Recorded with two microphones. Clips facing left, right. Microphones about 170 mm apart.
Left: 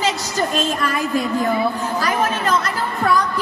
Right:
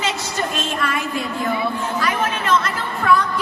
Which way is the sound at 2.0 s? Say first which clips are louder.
Left 3 dB; 35° left (ahead or behind).